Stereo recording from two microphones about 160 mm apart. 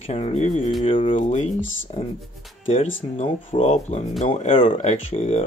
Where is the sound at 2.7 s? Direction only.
35° left (ahead or behind).